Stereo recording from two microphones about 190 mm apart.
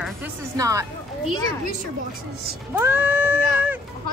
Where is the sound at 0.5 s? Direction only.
15° right (ahead or behind).